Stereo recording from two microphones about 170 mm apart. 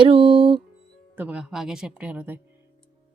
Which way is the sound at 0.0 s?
30° right (ahead or behind).